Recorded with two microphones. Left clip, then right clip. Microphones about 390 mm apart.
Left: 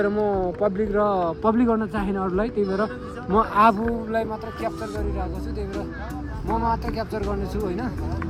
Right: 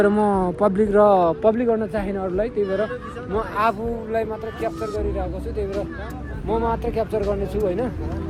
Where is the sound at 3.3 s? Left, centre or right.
Centre.